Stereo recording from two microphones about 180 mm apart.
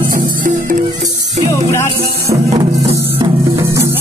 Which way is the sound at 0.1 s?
45° right (ahead or behind).